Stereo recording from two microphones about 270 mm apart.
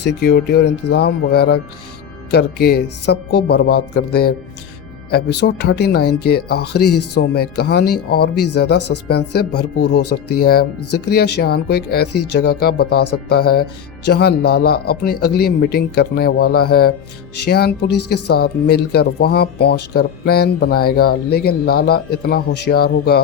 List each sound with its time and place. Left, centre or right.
0.0 s speech: left
6.0 s a woman's voice: left
6.2 s speech: left
6.9 s a woman's voice: left
7.2 s speech: left
8.4 s a woman's voice: left
9.0 s speech: left
10.0 s a woman's voice: left
10.4 s speech: left
17.9 s a woman's voice: left
18.3 s speech: left